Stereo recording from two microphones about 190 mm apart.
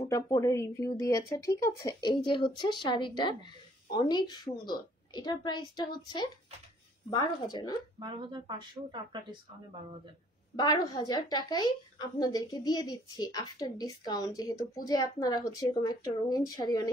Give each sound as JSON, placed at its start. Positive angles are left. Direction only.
{"t": 0.0, "sound": "a woman's voice", "side_deg": 20}
{"t": 8.0, "sound": "speech", "side_deg": -25}
{"t": 10.5, "sound": "a woman's voice", "side_deg": 20}